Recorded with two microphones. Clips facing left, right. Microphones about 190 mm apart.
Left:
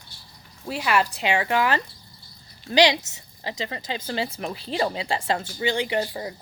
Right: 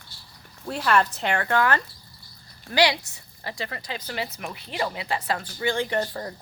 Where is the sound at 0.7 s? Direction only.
5° left (ahead or behind).